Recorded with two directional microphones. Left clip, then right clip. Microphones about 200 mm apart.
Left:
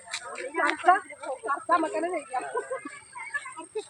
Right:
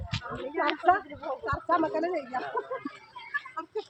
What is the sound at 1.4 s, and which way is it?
Speech, 10° right (ahead or behind).